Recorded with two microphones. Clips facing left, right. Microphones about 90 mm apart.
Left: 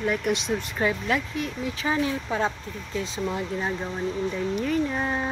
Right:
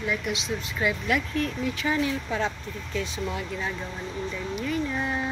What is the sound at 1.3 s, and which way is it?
Speech, 20° left (ahead or behind).